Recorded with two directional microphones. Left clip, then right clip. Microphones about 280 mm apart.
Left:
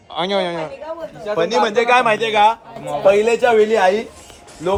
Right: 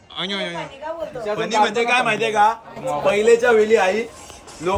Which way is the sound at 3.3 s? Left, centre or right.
Centre.